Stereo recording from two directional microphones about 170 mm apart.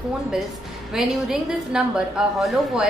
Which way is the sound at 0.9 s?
5° right (ahead or behind).